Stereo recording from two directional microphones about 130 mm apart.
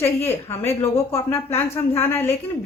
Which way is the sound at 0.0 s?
20° left (ahead or behind).